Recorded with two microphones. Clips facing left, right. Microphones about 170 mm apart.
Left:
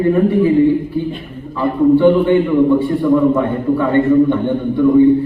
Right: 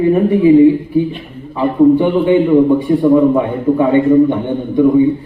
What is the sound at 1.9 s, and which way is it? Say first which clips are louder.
A man's voice: left 1 dB; 15° right (ahead or behind).